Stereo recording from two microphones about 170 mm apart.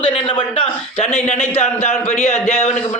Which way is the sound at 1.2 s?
40° left (ahead or behind).